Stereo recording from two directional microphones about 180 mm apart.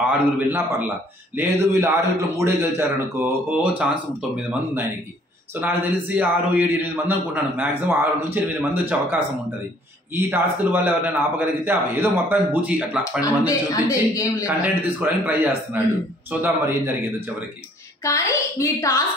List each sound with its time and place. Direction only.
0.0 s speech: 10° right (ahead or behind)
5.5 s speech: 10° right (ahead or behind)
13.2 s a man's voice: 20° left (ahead or behind)
14.4 s speech: 10° right (ahead or behind)
18.0 s a man's voice: 15° left (ahead or behind)